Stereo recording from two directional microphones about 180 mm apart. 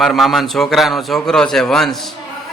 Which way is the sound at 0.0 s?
Centre (ahead or behind).